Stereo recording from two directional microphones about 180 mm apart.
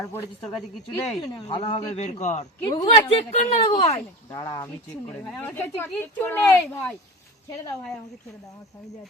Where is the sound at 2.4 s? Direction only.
20° left (ahead or behind).